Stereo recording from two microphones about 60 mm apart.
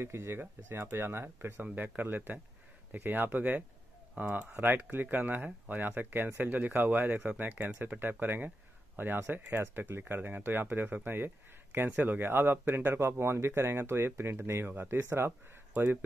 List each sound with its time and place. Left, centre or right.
0.0 s speech: right
1.6 s speech: right